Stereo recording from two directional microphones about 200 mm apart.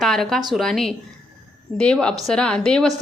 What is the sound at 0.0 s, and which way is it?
A woman's voice, centre (ahead or behind).